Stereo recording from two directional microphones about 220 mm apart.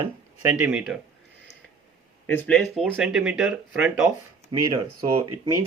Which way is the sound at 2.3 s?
5° left (ahead or behind).